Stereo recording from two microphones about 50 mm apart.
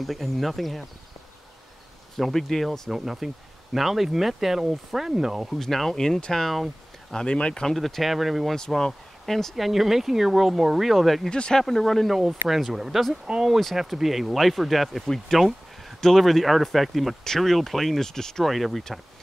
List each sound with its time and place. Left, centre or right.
0.0 s speech: centre
2.1 s speech: centre
2.9 s speech: centre
5.6 s speech: centre
7.2 s speech: left
7.6 s speech: centre
8.5 s speech: centre
9.7 s speech: centre
11.2 s speech: centre
11.6 s speech: centre
12.2 s speech: centre